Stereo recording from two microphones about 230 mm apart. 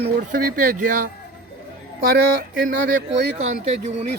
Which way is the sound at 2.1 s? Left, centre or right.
Right.